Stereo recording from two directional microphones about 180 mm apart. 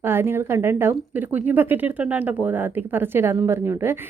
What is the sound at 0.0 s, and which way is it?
A woman's voice, 10° right (ahead or behind).